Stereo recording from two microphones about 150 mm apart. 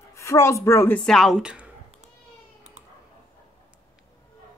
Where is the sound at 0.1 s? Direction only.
20° left (ahead or behind); by 1.7 s 5° right (ahead or behind).